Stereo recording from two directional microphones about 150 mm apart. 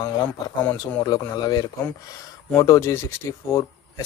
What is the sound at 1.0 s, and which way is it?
Speech, 25° left (ahead or behind).